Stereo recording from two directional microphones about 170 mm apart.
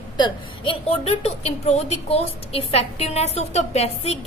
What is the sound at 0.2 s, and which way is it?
A woman's voice, 30° left (ahead or behind).